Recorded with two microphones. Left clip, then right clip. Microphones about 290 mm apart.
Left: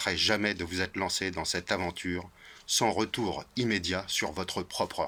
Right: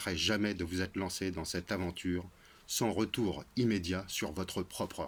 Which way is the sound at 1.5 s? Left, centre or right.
Centre.